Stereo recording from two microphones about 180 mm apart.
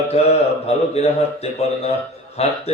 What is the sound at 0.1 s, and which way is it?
Speech, 35° left (ahead or behind).